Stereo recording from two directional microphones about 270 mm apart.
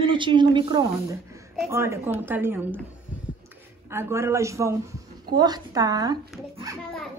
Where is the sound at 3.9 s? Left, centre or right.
Centre.